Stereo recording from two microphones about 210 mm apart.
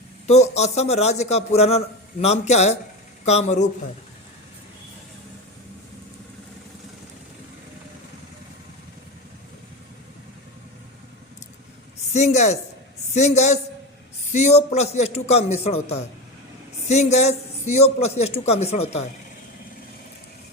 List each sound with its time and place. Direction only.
0.3 s a man's voice: 30° left (ahead or behind)
12.1 s a man's voice: 35° left (ahead or behind)